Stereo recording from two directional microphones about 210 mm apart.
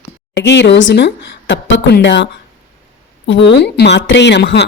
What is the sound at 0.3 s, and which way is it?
A woman's voice, 55° left (ahead or behind).